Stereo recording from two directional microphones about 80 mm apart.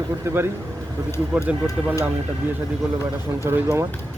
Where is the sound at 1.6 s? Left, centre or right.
Left.